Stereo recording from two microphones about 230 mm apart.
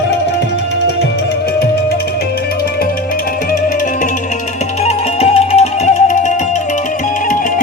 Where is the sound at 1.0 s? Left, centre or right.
Left.